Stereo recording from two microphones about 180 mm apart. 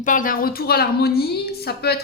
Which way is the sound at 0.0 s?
45° left (ahead or behind).